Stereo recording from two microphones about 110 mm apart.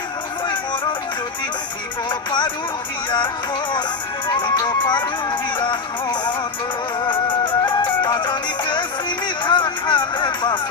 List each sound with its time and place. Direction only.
2.0 s speech: 45° left (ahead or behind)
4.3 s music: 40° left (ahead or behind)